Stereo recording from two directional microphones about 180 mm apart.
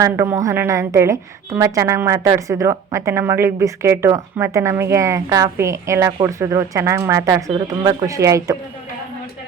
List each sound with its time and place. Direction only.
0.0 s a woman's voice: 15° right (ahead or behind)